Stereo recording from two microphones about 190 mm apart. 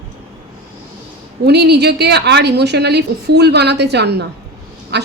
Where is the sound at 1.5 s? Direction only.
60° right (ahead or behind).